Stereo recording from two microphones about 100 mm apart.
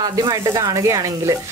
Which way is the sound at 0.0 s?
40° right (ahead or behind).